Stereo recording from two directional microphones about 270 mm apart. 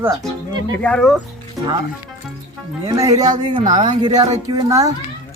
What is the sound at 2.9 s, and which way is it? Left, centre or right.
A woman's voice, centre.